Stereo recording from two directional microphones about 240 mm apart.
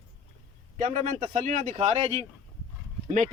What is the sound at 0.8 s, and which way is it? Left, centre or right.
Speech, right.